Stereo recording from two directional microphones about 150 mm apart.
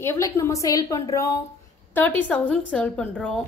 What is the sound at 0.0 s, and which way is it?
A woman's voice, 20° left (ahead or behind).